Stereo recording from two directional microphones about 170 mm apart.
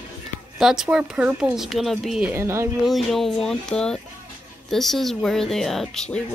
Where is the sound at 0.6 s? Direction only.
5° right (ahead or behind).